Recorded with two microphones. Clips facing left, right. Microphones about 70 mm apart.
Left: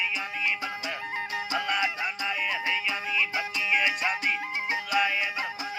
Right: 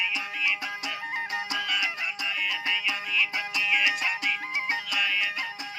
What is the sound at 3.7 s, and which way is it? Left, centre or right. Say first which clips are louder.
Music: left 1 dB; left.